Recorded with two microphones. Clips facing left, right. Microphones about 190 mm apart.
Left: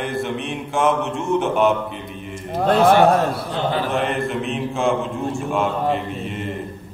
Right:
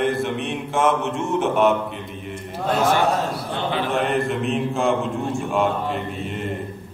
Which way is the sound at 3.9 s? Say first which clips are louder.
Even; centre (ahead or behind).